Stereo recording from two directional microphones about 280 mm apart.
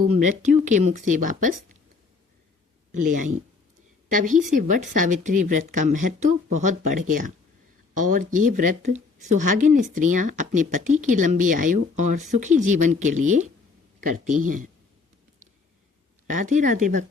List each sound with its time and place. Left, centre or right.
0.3 s speech: right
2.9 s speech: right
16.2 s speech: right